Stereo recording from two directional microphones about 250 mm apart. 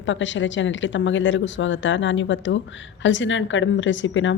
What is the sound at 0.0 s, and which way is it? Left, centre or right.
Speech, left.